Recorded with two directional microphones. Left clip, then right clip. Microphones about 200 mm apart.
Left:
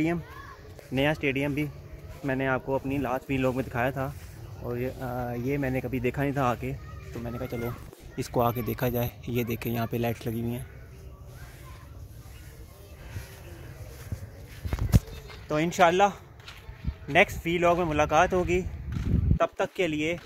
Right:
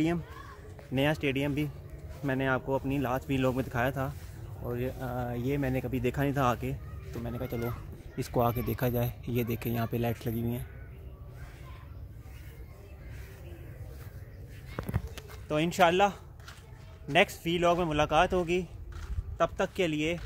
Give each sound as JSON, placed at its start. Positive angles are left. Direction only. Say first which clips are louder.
{"t": 0.9, "sound": "speech", "louder": "left 3 dB", "side_deg": 0}
{"t": 7.4, "sound": "speech", "louder": "left 2 dB", "side_deg": -20}
{"t": 8.2, "sound": "speech", "louder": "left 3 dB", "side_deg": 0}
{"t": 15.4, "sound": "speech", "louder": "left 3 dB", "side_deg": 10}